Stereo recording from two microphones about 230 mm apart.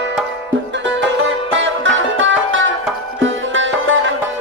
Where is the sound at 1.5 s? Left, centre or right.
Right.